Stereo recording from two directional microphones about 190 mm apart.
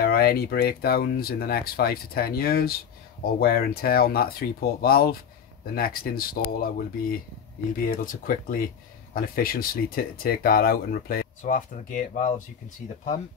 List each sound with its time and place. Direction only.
0.0 s speech: 55° left (ahead or behind)